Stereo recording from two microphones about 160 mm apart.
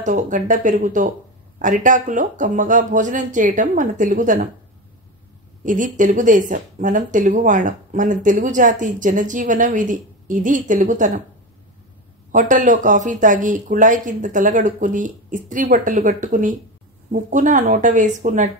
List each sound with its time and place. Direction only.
0.0 s speech: 55° right (ahead or behind)
5.6 s speech: 55° right (ahead or behind)
12.3 s speech: 55° right (ahead or behind)